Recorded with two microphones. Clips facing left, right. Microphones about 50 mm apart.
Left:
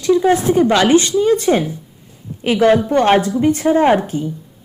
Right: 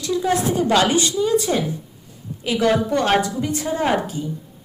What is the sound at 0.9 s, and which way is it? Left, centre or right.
Speech, left.